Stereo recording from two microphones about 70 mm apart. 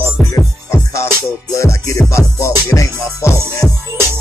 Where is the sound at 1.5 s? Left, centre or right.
Left.